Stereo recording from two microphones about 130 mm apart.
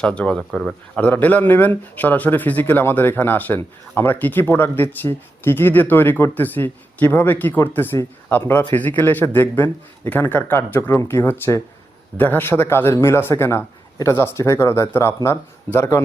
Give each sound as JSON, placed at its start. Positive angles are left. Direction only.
{"t": 0.0, "sound": "speech", "side_deg": 5}